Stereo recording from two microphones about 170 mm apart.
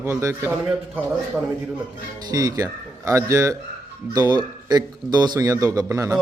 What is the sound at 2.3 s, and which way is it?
Speech, 20° right (ahead or behind).